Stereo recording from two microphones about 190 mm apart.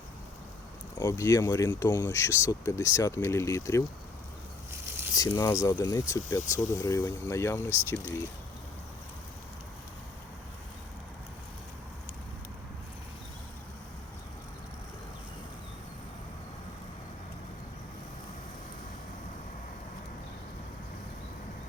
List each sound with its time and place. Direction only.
0.9 s speech: 15° left (ahead or behind)
5.1 s speech: 20° left (ahead or behind)